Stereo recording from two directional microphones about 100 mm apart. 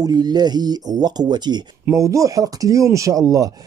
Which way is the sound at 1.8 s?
30° right (ahead or behind).